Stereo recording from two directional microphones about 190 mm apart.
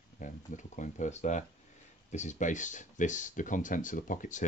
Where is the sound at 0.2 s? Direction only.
40° left (ahead or behind).